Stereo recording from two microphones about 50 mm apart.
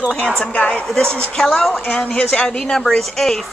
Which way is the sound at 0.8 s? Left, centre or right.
Centre.